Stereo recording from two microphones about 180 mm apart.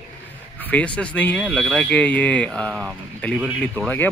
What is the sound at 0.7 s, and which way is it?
Speech, 5° left (ahead or behind).